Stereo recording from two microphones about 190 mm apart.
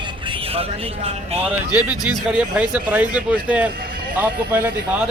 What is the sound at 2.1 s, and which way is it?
Speech, 5° right (ahead or behind).